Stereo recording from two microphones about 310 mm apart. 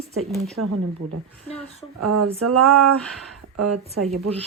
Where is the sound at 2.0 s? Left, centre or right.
Right.